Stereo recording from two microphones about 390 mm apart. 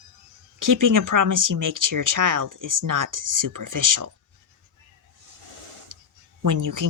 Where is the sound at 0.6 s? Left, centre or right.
Right.